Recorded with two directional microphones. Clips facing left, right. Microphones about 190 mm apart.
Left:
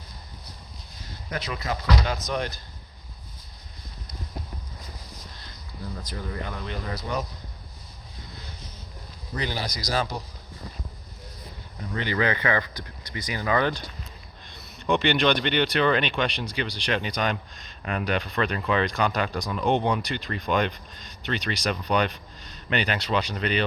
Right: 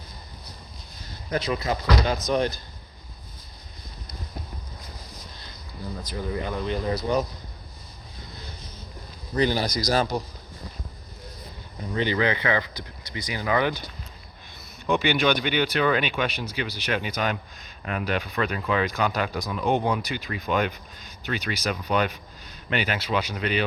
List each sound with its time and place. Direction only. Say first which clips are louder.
1.3 s speech: right 5 dB; 30° right (ahead or behind)
6.7 s speech: right 8 dB; 30° right (ahead or behind)
9.4 s speech: right 8 dB; 45° right (ahead or behind)
11.9 s speech: right 2 dB; 20° right (ahead or behind)
14.8 s speech: even; centre (ahead or behind)